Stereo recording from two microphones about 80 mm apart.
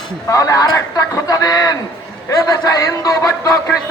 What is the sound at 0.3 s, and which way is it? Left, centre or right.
A man's voice, left.